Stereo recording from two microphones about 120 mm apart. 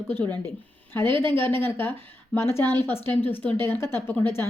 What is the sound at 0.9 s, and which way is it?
Speech, 20° left (ahead or behind).